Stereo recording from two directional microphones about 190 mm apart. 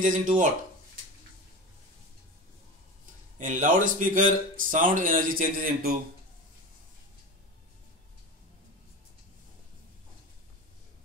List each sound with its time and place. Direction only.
0.0 s speech: 40° right (ahead or behind)
3.3 s speech: 45° right (ahead or behind)